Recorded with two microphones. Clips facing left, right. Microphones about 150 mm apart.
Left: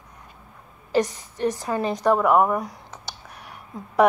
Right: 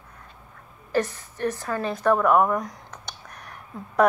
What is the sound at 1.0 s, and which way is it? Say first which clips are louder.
A woman's voice: left 3 dB; 15° left (ahead or behind).